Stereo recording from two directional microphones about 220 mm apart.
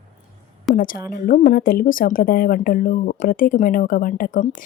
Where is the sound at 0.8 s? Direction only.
40° left (ahead or behind).